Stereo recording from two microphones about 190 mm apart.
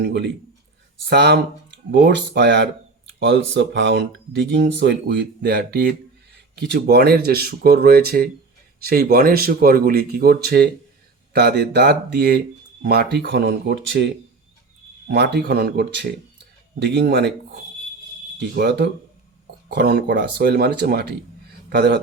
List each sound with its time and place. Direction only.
0.0 s speech: 65° right (ahead or behind)